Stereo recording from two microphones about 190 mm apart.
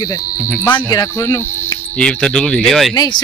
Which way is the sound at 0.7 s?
20° left (ahead or behind).